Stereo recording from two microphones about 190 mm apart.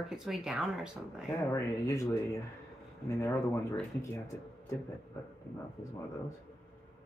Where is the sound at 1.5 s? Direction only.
15° left (ahead or behind).